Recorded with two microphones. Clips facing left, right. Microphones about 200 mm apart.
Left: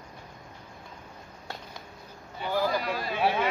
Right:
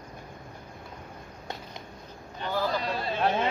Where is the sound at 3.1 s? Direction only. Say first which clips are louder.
Even; 10° left (ahead or behind).